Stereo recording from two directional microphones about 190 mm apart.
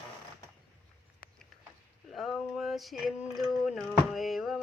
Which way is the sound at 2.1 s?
Centre (ahead or behind).